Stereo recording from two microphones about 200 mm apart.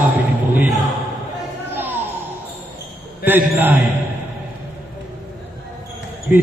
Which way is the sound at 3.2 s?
10° right (ahead or behind).